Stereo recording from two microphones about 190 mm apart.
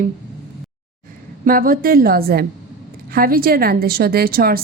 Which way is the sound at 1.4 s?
50° right (ahead or behind).